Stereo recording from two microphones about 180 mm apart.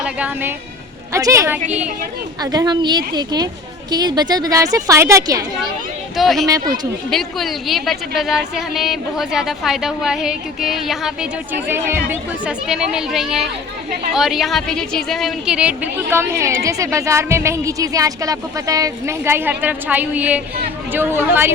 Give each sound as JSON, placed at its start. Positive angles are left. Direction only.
{"t": 0.0, "sound": "speech", "side_deg": -5}
{"t": 1.1, "sound": "a woman's voice", "side_deg": -15}
{"t": 6.1, "sound": "a woman's voice", "side_deg": 0}